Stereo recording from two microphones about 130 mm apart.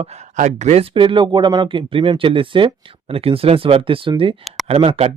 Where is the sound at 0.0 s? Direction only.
55° right (ahead or behind).